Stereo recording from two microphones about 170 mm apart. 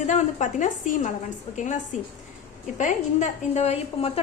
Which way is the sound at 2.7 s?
45° left (ahead or behind).